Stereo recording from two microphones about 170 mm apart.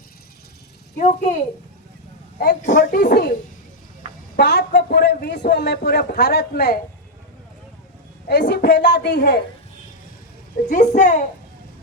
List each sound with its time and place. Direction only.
0.9 s a child's voice: 45° left (ahead or behind)
2.6 s a child's voice: 45° left (ahead or behind)
2.9 s speech: 60° left (ahead or behind)
4.4 s a man's voice: 75° left (ahead or behind)
8.3 s a man's voice: 75° left (ahead or behind)
10.7 s a child's voice: 45° left (ahead or behind)